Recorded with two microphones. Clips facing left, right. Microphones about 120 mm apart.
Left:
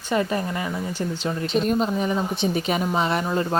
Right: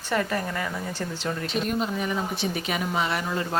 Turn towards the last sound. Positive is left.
turn(degrees=30)  # may be behind; listen again after turning